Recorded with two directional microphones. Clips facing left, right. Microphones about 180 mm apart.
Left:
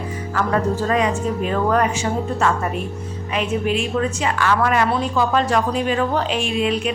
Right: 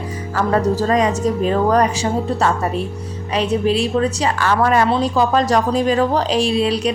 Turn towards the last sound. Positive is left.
turn(degrees=-35)  # may be behind; listen again after turning